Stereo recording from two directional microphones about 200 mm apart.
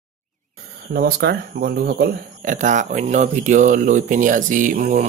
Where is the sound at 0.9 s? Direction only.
50° right (ahead or behind).